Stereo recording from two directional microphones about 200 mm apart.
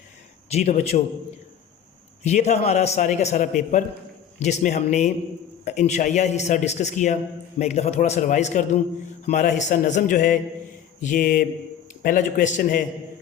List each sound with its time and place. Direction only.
0.5 s a man's voice: 35° left (ahead or behind)
2.2 s a man's voice: 35° left (ahead or behind)
11.0 s mantra: 40° left (ahead or behind)
12.0 s a man's voice: 40° left (ahead or behind)